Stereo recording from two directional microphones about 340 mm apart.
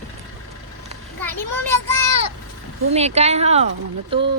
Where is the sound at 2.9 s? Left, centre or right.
Centre.